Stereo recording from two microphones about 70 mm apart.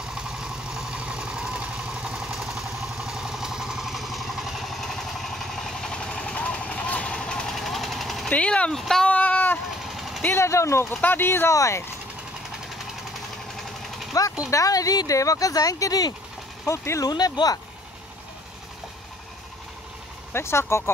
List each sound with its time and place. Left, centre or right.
0.1 s vehicle: centre
1.6 s vehicle: centre
1.9 s vehicle: centre
8.3 s speech: centre
8.7 s speech: centre
9.0 s a sound: left
10.2 s speech: left
11.0 s speech: left
11.5 s speech: left
14.2 s speech: left
16.6 s speech: left
17.0 s speech: left
20.3 s speech: left